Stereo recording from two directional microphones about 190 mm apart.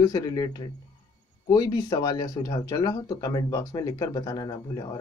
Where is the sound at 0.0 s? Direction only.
20° left (ahead or behind).